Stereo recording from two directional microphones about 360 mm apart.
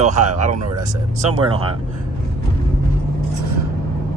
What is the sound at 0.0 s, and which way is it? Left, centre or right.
Speech, centre.